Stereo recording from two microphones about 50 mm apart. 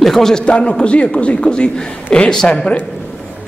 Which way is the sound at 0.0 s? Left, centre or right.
Centre.